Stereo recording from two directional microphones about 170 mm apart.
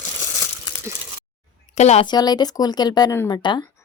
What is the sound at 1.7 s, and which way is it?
Speech, 40° left (ahead or behind).